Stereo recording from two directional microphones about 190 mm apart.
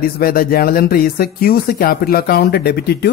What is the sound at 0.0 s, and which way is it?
Speech, 50° left (ahead or behind).